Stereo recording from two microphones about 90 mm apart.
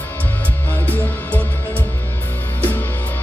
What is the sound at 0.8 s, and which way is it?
Music, 20° left (ahead or behind).